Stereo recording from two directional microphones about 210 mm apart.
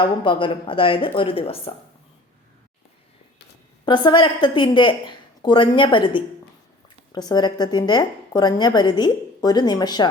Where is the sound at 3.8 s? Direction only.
20° left (ahead or behind).